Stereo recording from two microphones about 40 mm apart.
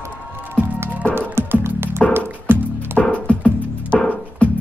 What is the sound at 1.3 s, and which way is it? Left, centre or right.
Music, right.